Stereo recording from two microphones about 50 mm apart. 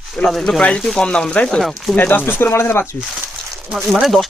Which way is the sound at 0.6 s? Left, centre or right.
Centre.